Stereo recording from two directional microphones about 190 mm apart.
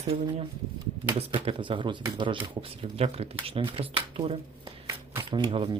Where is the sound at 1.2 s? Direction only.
30° right (ahead or behind).